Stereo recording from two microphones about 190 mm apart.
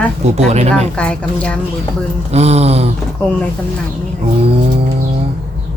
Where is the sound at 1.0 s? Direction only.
5° left (ahead or behind).